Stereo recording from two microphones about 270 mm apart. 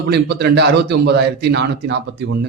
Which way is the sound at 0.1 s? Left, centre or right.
Right.